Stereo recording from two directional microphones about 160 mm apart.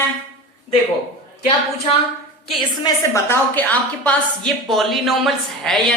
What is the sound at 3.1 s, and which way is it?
A woman's voice, 15° left (ahead or behind).